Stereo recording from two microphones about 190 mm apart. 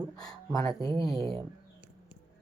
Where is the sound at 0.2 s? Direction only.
20° left (ahead or behind).